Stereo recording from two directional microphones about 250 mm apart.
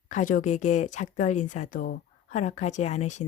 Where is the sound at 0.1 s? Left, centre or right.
Left.